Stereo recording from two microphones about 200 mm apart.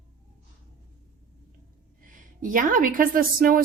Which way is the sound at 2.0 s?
40° right (ahead or behind).